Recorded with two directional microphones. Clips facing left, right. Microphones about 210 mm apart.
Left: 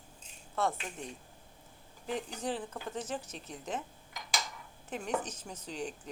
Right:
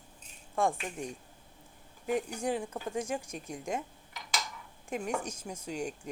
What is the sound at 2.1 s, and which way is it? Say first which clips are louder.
A woman's voice: right 5 dB; 10° right (ahead or behind).